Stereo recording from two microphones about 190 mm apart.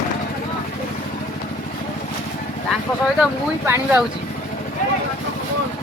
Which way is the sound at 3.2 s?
10° right (ahead or behind).